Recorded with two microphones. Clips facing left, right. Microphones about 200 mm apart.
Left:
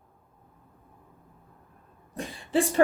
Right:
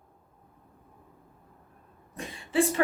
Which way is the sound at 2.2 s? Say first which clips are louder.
Left 5 dB; 35° left (ahead or behind).